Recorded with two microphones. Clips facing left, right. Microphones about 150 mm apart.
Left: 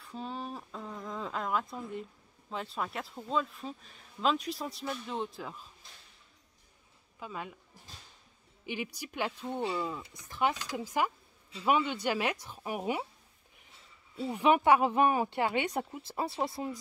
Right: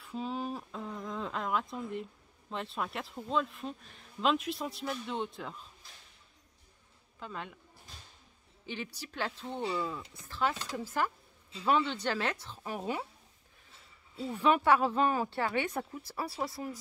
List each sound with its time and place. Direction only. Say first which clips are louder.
0.0 s a sound: right 3 dB; centre (ahead or behind)
2.5 s a man's voice: even; centre (ahead or behind)
7.2 s a man's voice: left 1 dB; 5° left (ahead or behind)
8.6 s speech: left 3 dB; 10° left (ahead or behind)
14.1 s speech: left 2 dB; 15° left (ahead or behind)